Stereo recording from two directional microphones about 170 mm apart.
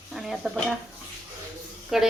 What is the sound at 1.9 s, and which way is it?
Speech, centre (ahead or behind).